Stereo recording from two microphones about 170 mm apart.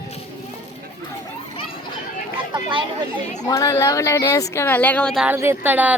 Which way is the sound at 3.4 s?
20° left (ahead or behind).